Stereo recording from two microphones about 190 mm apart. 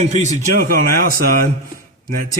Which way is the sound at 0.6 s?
50° right (ahead or behind).